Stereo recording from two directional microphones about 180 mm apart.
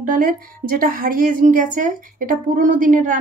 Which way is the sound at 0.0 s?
50° right (ahead or behind).